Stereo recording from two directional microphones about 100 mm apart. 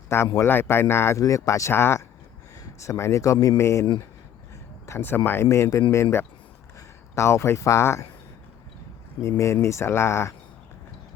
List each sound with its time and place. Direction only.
0.1 s speech: 25° left (ahead or behind)
4.9 s speech: 20° left (ahead or behind)
9.4 s speech: 30° left (ahead or behind)